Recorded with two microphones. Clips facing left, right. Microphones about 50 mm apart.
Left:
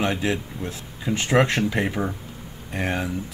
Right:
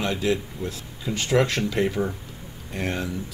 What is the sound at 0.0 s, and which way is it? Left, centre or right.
Speech, left.